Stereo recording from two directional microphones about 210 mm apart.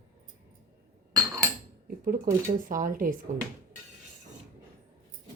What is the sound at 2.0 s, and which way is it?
Speech, 40° right (ahead or behind).